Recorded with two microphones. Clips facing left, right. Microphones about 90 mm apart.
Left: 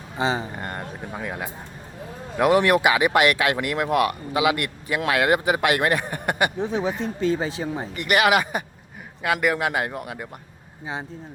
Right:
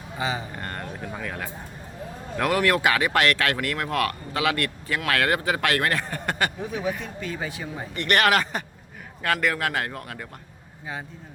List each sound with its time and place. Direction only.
0.2 s speech: 30° left (ahead or behind)
0.5 s speech: 15° left (ahead or behind)
7.9 s speech: 10° left (ahead or behind)